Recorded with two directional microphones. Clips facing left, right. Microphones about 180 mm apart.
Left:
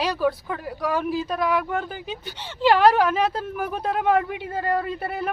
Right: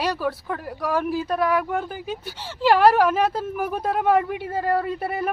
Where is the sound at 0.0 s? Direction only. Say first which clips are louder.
Left 2 dB; 5° right (ahead or behind).